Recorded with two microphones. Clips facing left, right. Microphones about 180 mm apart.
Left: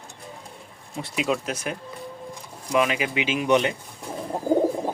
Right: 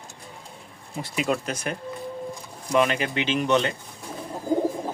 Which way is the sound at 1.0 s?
Centre (ahead or behind).